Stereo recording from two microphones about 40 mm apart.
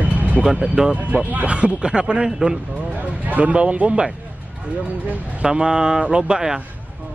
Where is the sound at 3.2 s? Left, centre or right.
Right.